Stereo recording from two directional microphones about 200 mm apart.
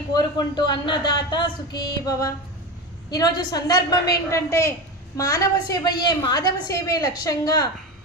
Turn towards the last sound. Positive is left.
turn(degrees=20)  # may be behind; listen again after turning